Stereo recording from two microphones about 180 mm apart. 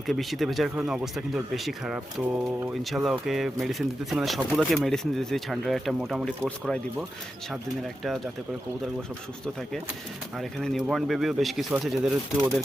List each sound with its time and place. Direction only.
0.1 s speech: centre (ahead or behind)
10.3 s speech: centre (ahead or behind)